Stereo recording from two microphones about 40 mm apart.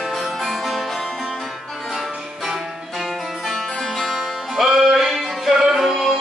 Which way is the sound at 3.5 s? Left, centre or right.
Centre.